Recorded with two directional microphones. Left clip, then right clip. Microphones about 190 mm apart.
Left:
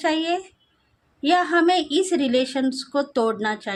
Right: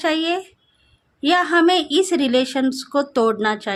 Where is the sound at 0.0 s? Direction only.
20° right (ahead or behind).